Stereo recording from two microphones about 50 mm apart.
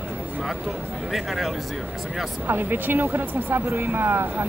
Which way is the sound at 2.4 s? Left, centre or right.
Right.